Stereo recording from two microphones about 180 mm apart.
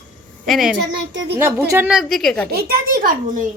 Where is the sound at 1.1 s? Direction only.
80° right.